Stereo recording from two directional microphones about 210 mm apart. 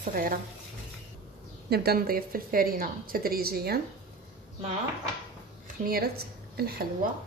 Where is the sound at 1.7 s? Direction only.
50° right (ahead or behind).